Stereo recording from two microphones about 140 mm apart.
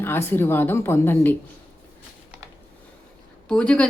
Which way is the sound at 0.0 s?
15° left (ahead or behind).